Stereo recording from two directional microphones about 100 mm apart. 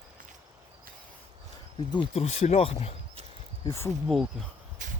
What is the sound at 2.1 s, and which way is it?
Speech, 90° left.